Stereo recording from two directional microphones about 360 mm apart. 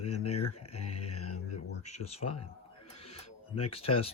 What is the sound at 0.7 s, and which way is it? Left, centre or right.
Speech, centre.